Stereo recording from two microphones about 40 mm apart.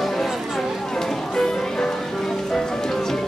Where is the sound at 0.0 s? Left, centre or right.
Centre.